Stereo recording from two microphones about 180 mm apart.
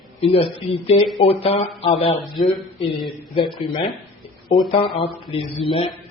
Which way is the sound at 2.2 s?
Centre (ahead or behind).